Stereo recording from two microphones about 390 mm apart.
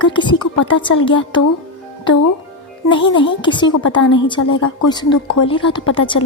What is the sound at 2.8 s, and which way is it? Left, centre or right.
A woman's voice, centre.